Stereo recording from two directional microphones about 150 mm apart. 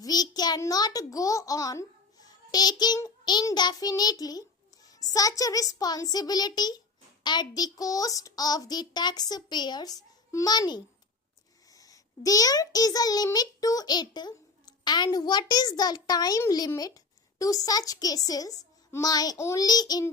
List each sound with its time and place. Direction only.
0.0 s a child's voice: 25° left (ahead or behind)